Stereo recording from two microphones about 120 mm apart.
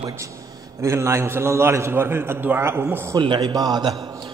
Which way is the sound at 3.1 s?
40° right (ahead or behind).